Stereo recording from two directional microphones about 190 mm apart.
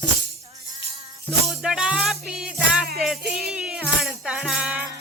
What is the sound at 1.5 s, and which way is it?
Music, 5° right (ahead or behind).